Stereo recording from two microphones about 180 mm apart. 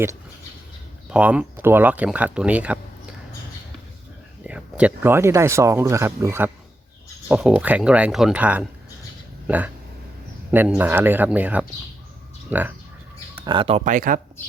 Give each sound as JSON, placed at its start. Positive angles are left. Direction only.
{"t": 1.1, "sound": "speech", "side_deg": -5}
{"t": 4.4, "sound": "speech", "side_deg": -5}
{"t": 10.8, "sound": "speech", "side_deg": -10}
{"t": 13.4, "sound": "speech", "side_deg": -25}